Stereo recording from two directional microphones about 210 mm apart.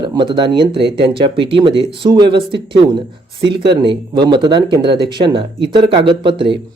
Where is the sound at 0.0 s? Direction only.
20° right (ahead or behind).